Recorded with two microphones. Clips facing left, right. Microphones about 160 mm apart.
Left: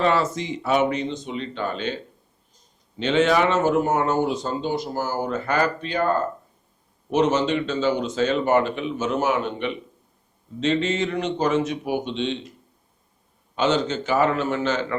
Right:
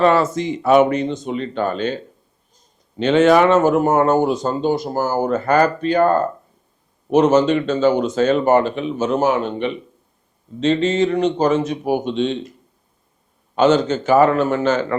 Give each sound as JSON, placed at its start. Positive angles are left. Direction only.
{"t": 0.0, "sound": "speech", "side_deg": -50}
{"t": 3.0, "sound": "speech", "side_deg": -50}
{"t": 13.6, "sound": "speech", "side_deg": -45}